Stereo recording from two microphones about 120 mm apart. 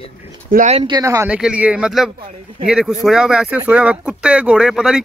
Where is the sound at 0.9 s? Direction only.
25° right (ahead or behind).